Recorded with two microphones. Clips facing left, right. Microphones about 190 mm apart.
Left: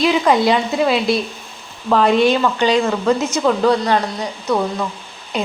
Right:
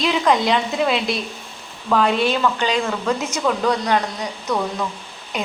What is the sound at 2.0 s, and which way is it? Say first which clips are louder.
Speech: left 9 dB; 40° left (ahead or behind).